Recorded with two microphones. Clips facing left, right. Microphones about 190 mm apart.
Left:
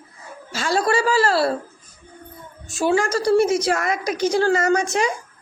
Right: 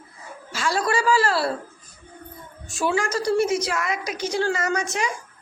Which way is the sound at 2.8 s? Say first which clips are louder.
Left 4 dB; 30° left (ahead or behind).